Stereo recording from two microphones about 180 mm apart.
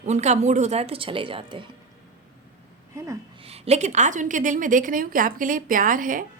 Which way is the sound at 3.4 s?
35° right (ahead or behind).